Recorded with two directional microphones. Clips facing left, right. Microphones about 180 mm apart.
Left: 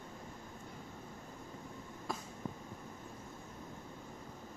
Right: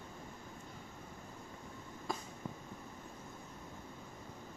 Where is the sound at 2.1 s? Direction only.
Centre (ahead or behind).